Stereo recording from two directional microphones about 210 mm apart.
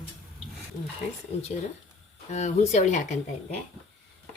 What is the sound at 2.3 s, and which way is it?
Speech, 35° left (ahead or behind).